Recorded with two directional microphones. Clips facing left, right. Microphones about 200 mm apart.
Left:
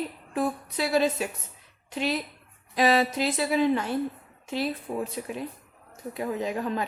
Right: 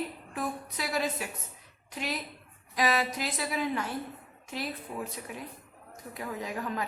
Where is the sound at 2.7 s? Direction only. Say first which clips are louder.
Left 6 dB; 30° left (ahead or behind).